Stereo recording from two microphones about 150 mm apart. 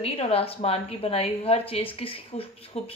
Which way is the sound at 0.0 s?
40° left (ahead or behind).